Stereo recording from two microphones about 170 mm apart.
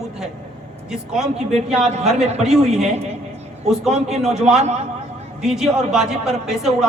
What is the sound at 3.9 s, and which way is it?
Speech, centre (ahead or behind).